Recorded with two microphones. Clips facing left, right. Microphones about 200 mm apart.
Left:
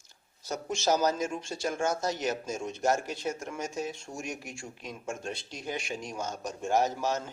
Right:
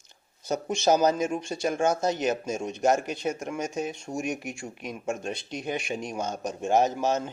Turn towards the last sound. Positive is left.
turn(degrees=-20)  # may be behind; listen again after turning